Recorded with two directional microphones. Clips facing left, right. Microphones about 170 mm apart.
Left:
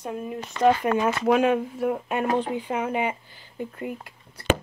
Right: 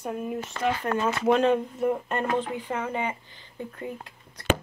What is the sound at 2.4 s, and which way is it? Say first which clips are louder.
Speech: left 3 dB; 15° left (ahead or behind).